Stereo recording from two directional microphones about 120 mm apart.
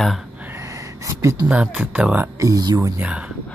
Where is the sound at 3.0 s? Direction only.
10° right (ahead or behind).